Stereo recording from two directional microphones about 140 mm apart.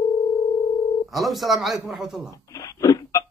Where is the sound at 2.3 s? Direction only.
25° left (ahead or behind).